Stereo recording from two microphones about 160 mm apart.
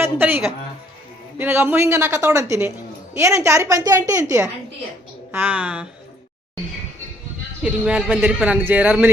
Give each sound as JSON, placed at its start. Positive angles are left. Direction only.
{"t": 0.0, "sound": "a man's voice", "side_deg": -10}
{"t": 7.6, "sound": "a man's voice", "side_deg": -5}